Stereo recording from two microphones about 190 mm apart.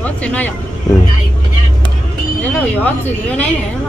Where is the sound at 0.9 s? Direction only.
20° left (ahead or behind).